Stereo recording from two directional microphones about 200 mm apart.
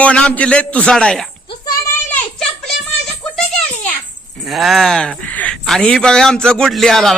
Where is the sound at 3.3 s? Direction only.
5° left (ahead or behind).